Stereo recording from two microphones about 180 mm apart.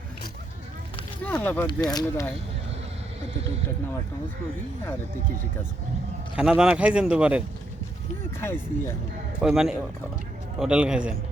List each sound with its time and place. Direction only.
1.2 s speech: 10° left (ahead or behind)
1.6 s speech: 20° left (ahead or behind)
6.3 s speech: 5° right (ahead or behind)
8.4 s speech: 15° left (ahead or behind)
9.4 s speech: centre (ahead or behind)